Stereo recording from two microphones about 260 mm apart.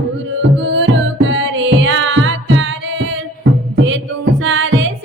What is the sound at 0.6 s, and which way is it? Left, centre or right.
Music, right.